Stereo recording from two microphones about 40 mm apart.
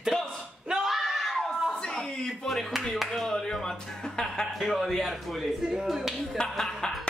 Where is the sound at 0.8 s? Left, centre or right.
Centre.